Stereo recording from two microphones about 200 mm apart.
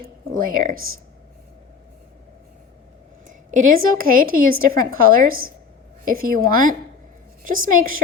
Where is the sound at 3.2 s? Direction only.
40° right (ahead or behind).